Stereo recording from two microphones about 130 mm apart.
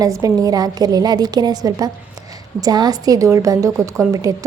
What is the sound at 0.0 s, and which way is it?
A woman's voice, 25° right (ahead or behind).